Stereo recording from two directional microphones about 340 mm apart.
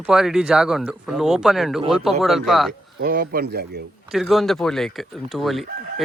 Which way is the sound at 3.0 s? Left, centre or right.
Right.